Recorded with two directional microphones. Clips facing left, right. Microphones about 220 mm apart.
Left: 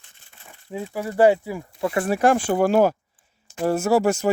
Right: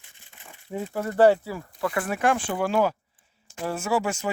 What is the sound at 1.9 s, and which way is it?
Speech, 30° left (ahead or behind).